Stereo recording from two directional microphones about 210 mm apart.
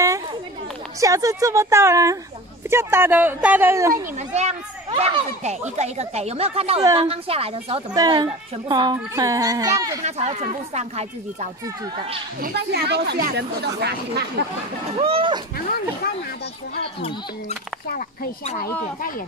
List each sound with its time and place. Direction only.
1.0 s a child's voice: 15° right (ahead or behind)
3.9 s a child's voice: 30° right (ahead or behind); by 9.9 s 15° right (ahead or behind)
10.0 s speech: 30° right (ahead or behind)
12.4 s a woman's voice: 50° right (ahead or behind)
15.0 s speech: 25° right (ahead or behind)
17.9 s speech: 35° left (ahead or behind)